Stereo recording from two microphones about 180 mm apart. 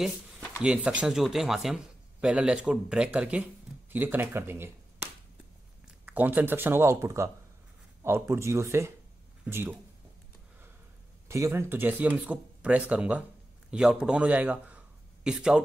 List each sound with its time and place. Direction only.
0.0 s a sound: centre (ahead or behind)
0.6 s speech: 5° right (ahead or behind)
11.2 s speech: 15° right (ahead or behind)